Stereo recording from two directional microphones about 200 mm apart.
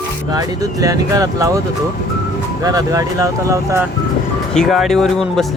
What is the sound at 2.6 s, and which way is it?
Speech, 15° right (ahead or behind).